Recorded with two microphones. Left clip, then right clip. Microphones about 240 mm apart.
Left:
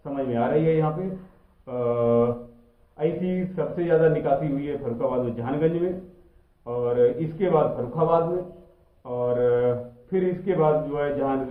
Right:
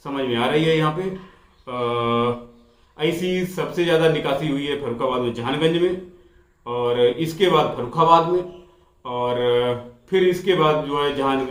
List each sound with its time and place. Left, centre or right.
0.0 s a man's voice: centre
6.7 s a man's voice: centre